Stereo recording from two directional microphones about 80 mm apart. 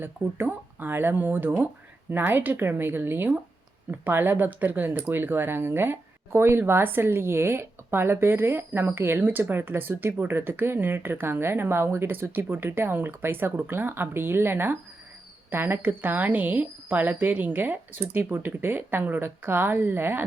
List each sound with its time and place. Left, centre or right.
0.0 s speech: right